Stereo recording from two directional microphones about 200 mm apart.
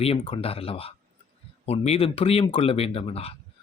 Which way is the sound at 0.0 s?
30° left (ahead or behind).